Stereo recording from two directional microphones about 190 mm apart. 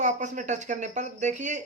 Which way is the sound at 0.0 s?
40° right (ahead or behind).